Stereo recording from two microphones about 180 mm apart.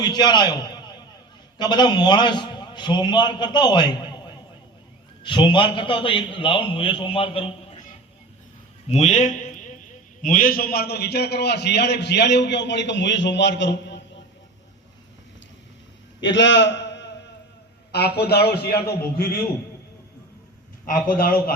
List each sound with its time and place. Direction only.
0.0 s a man's voice: 25° left (ahead or behind)
8.9 s a man's voice: 40° left (ahead or behind); by 14.0 s 75° left (ahead or behind)
16.2 s a man's voice: 80° left
17.9 s a man's voice: 65° left (ahead or behind)
21.1 s a man's voice: 55° left (ahead or behind)